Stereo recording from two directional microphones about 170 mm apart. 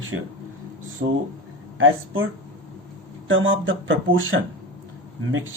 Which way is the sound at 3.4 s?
90° right.